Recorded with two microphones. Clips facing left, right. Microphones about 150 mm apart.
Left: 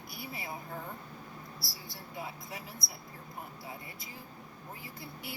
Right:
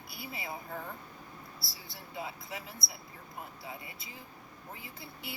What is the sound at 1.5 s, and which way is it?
Speech, 25° right (ahead or behind).